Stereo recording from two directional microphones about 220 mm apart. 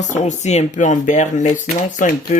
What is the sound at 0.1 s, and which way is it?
Speech, 30° left (ahead or behind).